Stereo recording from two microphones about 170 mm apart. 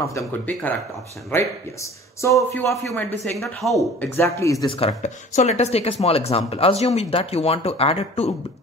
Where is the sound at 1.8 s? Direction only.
15° left (ahead or behind).